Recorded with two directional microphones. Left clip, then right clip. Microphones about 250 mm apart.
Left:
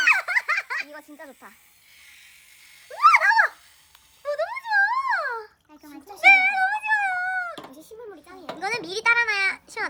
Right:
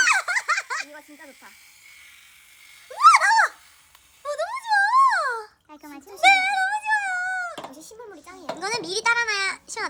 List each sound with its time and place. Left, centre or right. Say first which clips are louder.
0.0 s baby laughter: even; centre
1.2 s electric shaver: left 2 dB; left
2.9 s a sound: right 1 dB; centre
7.8 s children playing: left 1 dB; centre